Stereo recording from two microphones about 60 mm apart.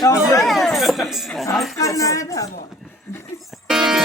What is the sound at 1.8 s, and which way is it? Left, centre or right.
Speech, left.